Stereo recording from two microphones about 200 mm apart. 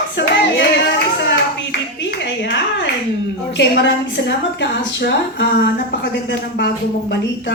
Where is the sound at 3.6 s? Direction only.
60° left (ahead or behind).